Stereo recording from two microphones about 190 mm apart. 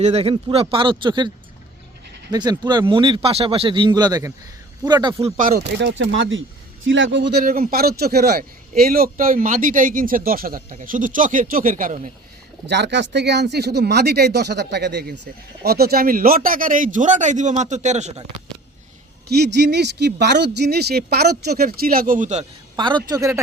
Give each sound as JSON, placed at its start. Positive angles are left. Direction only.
{"t": 0.0, "sound": "speech", "side_deg": -35}
{"t": 2.3, "sound": "speech", "side_deg": -20}
{"t": 5.4, "sound": "a man's voice", "side_deg": -45}
{"t": 5.8, "sound": "a man's voice", "side_deg": -75}
{"t": 12.6, "sound": "speech", "side_deg": -65}
{"t": 19.4, "sound": "a man's voice", "side_deg": -60}
{"t": 22.7, "sound": "speech", "side_deg": -25}